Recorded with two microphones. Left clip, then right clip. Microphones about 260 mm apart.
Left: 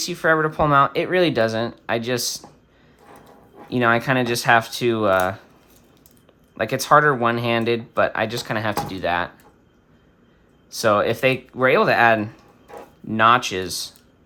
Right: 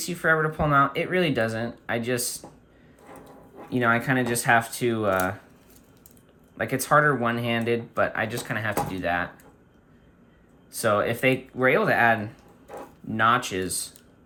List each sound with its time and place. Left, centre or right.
0.0 s speech: centre
3.8 s speech: centre
6.6 s speech: centre
10.7 s speech: centre